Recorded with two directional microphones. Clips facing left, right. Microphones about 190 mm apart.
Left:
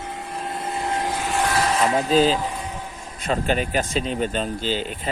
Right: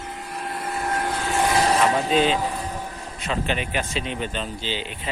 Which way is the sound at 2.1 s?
35° left (ahead or behind).